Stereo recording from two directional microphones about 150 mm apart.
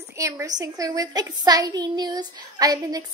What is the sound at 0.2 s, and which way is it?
A woman's voice, 20° right (ahead or behind).